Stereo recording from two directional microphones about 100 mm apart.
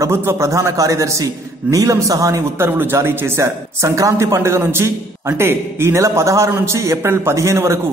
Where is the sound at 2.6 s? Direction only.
20° right (ahead or behind).